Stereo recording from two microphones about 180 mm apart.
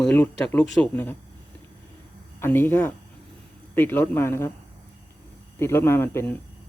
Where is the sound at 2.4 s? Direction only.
10° left (ahead or behind).